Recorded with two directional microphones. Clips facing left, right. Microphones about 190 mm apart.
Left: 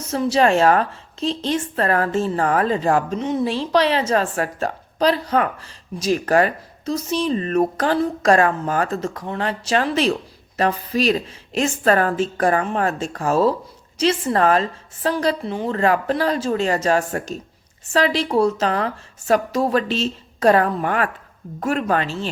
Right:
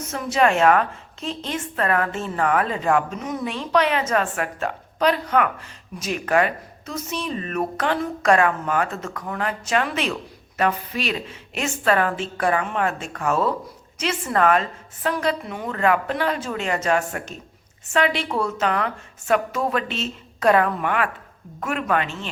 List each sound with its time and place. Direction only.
0.1 s a woman's voice: 30° left (ahead or behind)